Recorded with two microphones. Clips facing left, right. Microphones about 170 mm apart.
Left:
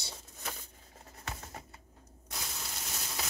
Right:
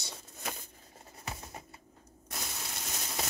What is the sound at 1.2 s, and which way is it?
Pigeon, 10° right (ahead or behind).